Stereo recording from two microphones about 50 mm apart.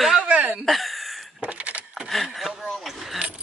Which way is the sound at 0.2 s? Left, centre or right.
Right.